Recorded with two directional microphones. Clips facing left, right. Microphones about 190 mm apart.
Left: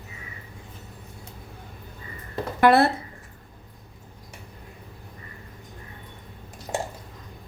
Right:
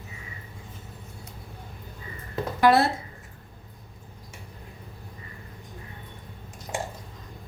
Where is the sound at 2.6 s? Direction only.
60° left (ahead or behind).